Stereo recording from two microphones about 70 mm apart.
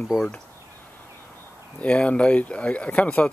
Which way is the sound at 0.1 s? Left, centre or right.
Centre.